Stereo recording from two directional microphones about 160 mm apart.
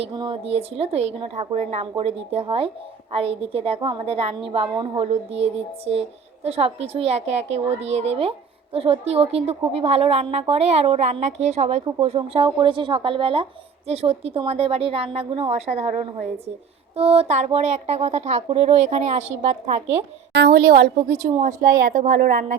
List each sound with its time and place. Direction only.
0.0 s speech: 30° right (ahead or behind); by 20.1 s 45° right (ahead or behind)
20.3 s a woman's voice: 90° right
21.3 s a woman's voice: 60° right (ahead or behind)